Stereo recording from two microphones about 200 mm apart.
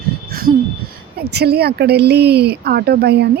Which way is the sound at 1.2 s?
55° right (ahead or behind).